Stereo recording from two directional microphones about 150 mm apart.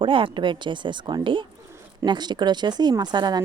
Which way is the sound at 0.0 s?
35° right (ahead or behind).